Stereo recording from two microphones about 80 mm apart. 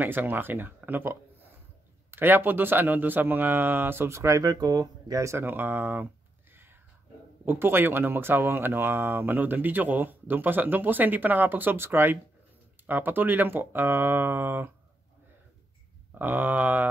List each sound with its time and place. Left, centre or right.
0.0 s speech: right
4.4 s speech: right
5.4 s speech: right
7.4 s speech: right
16.2 s speech: right